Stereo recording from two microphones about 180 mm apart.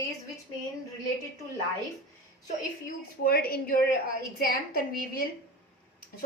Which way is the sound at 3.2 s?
60° left (ahead or behind).